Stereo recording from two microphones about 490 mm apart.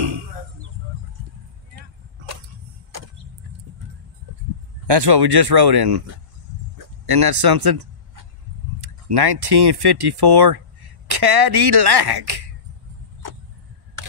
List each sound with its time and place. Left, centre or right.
4.8 s speech: right
7.1 s speech: right
7.4 s a sound: right
8.8 s speech: right
13.2 s vehicle: right
14.0 s camera: right